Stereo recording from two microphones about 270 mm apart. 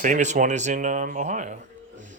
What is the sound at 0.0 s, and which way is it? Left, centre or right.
Speech, right.